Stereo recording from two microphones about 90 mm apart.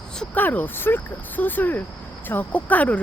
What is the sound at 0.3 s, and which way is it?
Speech, 20° left (ahead or behind).